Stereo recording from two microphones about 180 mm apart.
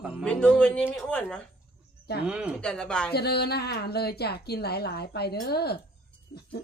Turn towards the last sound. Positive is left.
turn(degrees=65)  # may be behind; listen again after turning